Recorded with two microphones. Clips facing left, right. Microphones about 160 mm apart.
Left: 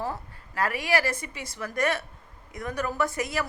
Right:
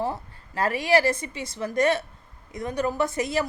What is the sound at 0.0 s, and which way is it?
A woman's voice, 25° right (ahead or behind).